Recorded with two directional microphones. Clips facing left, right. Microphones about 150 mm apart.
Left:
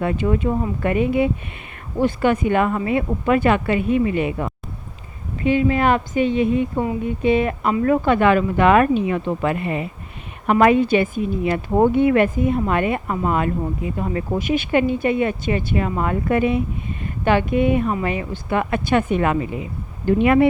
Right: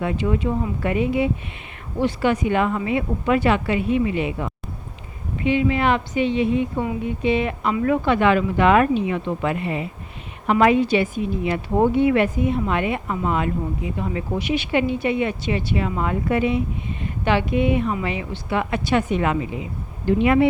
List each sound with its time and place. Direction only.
0.0 s speech: 50° left (ahead or behind)